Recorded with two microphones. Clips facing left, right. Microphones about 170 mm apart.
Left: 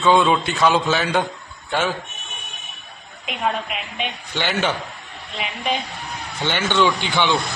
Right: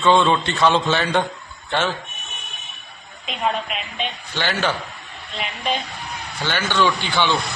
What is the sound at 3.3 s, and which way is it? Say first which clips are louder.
A man's voice: even; 10° left (ahead or behind).